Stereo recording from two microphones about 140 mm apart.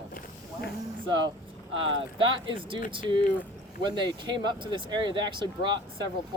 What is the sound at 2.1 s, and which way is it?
Speech, 40° right (ahead or behind).